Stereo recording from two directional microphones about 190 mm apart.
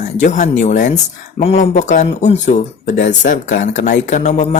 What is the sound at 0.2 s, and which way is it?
Speech, 40° left (ahead or behind).